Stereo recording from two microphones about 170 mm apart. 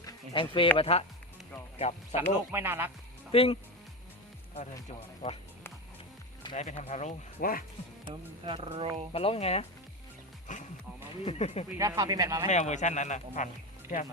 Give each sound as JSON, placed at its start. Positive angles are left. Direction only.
{"t": 0.0, "sound": "a sound", "side_deg": 30}
{"t": 0.8, "sound": "speech", "side_deg": 35}
{"t": 2.3, "sound": "speech", "side_deg": -15}
{"t": 3.3, "sound": "speech", "side_deg": 35}
{"t": 6.6, "sound": "speech", "side_deg": 45}
{"t": 7.3, "sound": "speech", "side_deg": 60}
{"t": 8.0, "sound": "speech", "side_deg": -30}
{"t": 9.1, "sound": "speech", "side_deg": 35}
{"t": 10.5, "sound": "speech", "side_deg": 45}
{"t": 11.3, "sound": "speech", "side_deg": 35}
{"t": 11.8, "sound": "speech", "side_deg": -20}
{"t": 12.5, "sound": "speech", "side_deg": 45}